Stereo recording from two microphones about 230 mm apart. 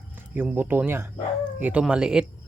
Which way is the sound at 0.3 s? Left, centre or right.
Centre.